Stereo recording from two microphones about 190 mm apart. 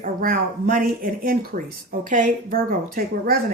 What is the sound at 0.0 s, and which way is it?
Speech, 45° right (ahead or behind).